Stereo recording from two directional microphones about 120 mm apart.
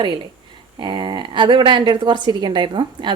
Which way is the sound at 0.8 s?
40° right (ahead or behind).